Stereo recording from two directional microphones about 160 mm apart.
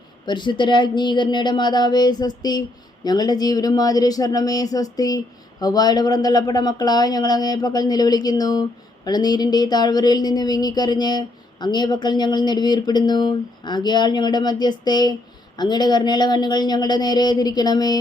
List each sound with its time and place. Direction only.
0.3 s speech: 30° left (ahead or behind)